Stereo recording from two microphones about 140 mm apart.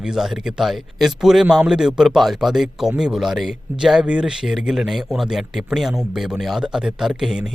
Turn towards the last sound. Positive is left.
turn(degrees=-5)  # may be behind; listen again after turning